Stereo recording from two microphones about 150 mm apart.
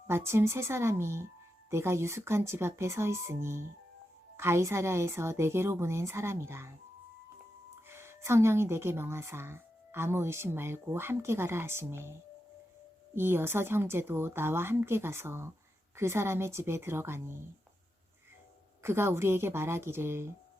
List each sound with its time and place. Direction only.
0.1 s speech: 15° right (ahead or behind)
7.9 s speech: 15° right (ahead or behind)
13.1 s speech: 15° right (ahead or behind)
18.8 s speech: 15° right (ahead or behind)